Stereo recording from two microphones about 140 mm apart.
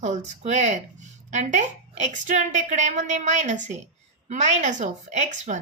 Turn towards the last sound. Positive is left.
turn(degrees=-60)  # may be behind; listen again after turning